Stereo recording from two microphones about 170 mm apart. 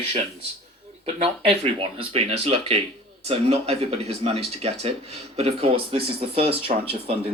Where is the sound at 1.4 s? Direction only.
35° right (ahead or behind).